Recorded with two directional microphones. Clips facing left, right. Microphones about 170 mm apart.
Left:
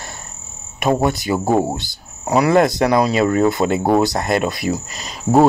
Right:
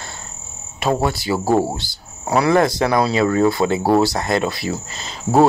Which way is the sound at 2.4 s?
20° left (ahead or behind).